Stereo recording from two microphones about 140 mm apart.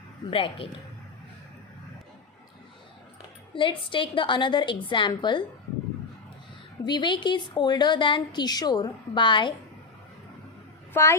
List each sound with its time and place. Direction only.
0.3 s a woman's voice: 40° left (ahead or behind)
3.5 s a woman's voice: 35° left (ahead or behind)
6.8 s a woman's voice: 35° left (ahead or behind)
10.9 s a woman's voice: 20° left (ahead or behind)